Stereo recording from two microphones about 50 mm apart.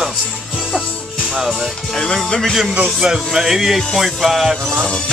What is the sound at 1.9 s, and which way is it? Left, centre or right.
Speech, centre.